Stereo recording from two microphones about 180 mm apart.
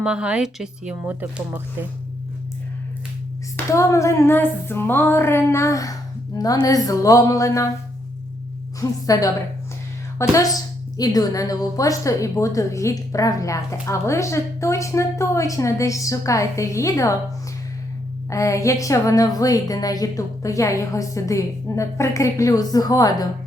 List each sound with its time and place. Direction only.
0.0 s speech: 5° right (ahead or behind)
3.7 s a woman's voice: 15° left (ahead or behind)
8.8 s a woman's voice: 20° left (ahead or behind)
18.3 s a woman's voice: 15° left (ahead or behind)